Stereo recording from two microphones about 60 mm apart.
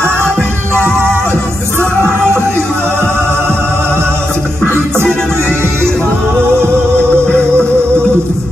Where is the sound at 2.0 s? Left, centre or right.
Right.